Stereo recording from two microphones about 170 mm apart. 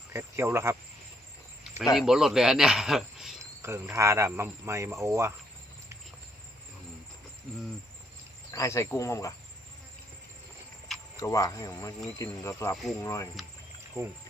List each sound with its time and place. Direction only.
0.1 s speech: 15° right (ahead or behind)
2.0 s speech: centre (ahead or behind)
3.9 s speech: 15° right (ahead or behind)
8.5 s cricket: 15° left (ahead or behind)
11.2 s speech: 20° left (ahead or behind)
12.2 s cricket: 20° left (ahead or behind)
12.7 s speech: centre (ahead or behind)
13.0 s speech: 20° left (ahead or behind)
14.0 s speech: 15° right (ahead or behind)